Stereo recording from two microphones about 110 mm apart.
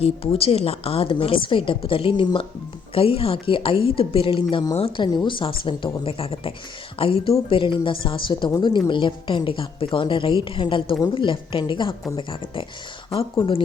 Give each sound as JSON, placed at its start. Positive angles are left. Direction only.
{"t": 0.0, "sound": "a woman's voice", "side_deg": 60}